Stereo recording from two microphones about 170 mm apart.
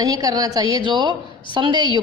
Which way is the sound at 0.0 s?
20° right (ahead or behind).